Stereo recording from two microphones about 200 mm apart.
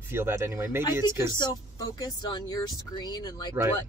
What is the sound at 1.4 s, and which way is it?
Speech, 20° left (ahead or behind).